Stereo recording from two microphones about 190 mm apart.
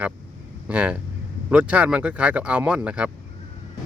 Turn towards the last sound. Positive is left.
turn(degrees=-5)  # may be behind; listen again after turning